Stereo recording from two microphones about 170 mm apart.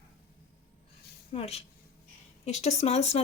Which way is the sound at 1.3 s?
35° left (ahead or behind).